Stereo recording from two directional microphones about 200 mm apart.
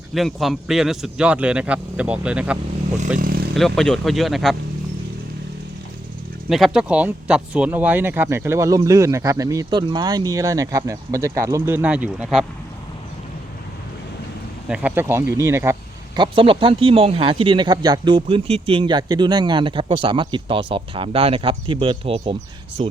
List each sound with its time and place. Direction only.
0.1 s speech: centre (ahead or behind)
3.2 s speech: 45° right (ahead or behind)
3.5 s speech: centre (ahead or behind)
6.5 s speech: 5° right (ahead or behind)
14.7 s speech: 5° right (ahead or behind); by 22.4 s 30° right (ahead or behind)